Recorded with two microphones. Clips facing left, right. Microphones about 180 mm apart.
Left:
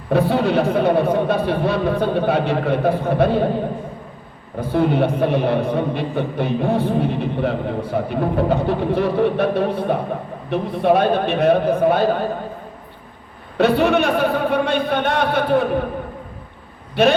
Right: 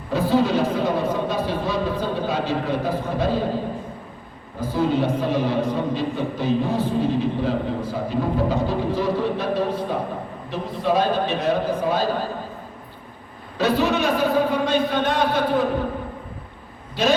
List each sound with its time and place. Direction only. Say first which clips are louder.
0.1 s a man's voice: left 2 dB; 65° left (ahead or behind)
4.6 s a man's voice: left 3 dB; 60° left (ahead or behind)
13.6 s a man's voice: left 5 dB; 60° left (ahead or behind)
16.9 s a man's voice: left 5 dB; 60° left (ahead or behind)